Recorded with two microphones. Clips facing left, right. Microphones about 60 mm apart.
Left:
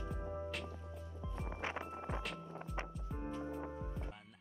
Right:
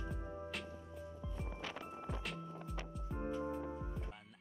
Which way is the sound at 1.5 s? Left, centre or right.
Left.